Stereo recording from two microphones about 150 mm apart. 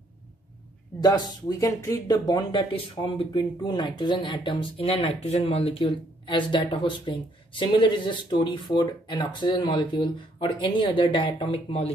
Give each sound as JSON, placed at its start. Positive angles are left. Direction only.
{"t": 1.0, "sound": "speech", "side_deg": 25}